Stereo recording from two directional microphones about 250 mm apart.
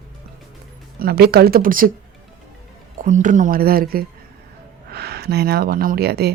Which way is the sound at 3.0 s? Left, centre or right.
Right.